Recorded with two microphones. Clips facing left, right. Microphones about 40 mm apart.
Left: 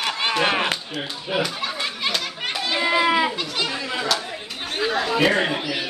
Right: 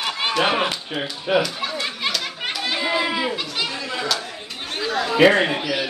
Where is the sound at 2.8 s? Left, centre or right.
Centre.